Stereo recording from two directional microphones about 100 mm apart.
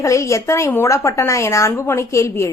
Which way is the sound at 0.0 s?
30° left (ahead or behind).